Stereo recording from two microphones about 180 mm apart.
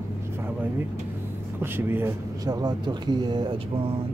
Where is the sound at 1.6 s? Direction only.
10° right (ahead or behind).